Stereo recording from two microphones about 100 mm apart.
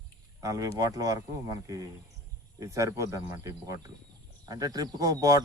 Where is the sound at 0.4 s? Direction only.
35° right (ahead or behind).